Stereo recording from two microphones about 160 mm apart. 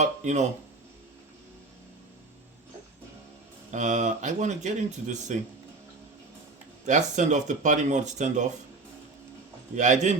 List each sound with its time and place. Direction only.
0.0 s a sound: 45° right (ahead or behind)
3.7 s speech: 50° right (ahead or behind)
6.8 s speech: 50° right (ahead or behind)
9.7 s speech: 50° right (ahead or behind)